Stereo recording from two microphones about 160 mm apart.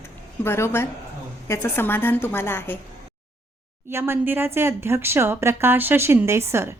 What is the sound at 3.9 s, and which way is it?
Speech, 15° right (ahead or behind).